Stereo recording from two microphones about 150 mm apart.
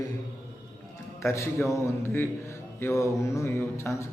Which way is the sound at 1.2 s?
20° left (ahead or behind).